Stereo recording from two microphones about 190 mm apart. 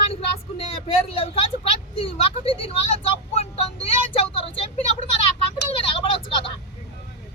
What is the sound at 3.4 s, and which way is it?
Vehicle, 30° left (ahead or behind).